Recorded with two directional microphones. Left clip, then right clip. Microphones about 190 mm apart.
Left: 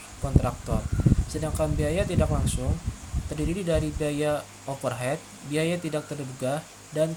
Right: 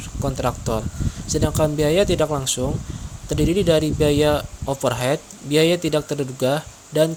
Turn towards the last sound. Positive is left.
turn(degrees=-45)  # may be behind; listen again after turning